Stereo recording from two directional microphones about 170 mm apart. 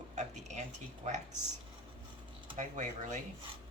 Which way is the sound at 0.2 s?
45° right (ahead or behind).